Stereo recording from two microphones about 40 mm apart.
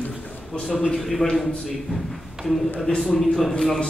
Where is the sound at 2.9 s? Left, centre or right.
Left.